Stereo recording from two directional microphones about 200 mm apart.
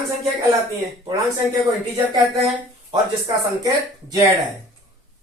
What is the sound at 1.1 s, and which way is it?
Speech, 20° right (ahead or behind).